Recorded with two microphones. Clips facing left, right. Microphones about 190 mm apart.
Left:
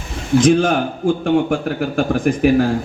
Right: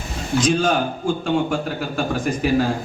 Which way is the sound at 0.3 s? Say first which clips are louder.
Left 5 dB; 55° left (ahead or behind).